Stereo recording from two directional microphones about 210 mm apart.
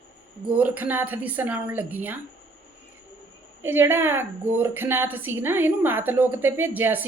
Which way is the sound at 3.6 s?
10° right (ahead or behind).